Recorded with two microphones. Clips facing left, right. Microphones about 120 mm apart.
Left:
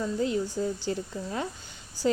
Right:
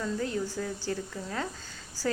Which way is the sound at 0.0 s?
20° left (ahead or behind).